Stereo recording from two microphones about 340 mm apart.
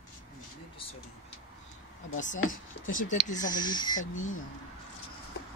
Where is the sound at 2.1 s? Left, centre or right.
Left.